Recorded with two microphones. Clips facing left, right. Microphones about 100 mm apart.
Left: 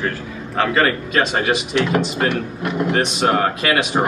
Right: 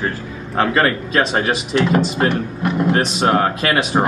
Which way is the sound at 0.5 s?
30° right (ahead or behind).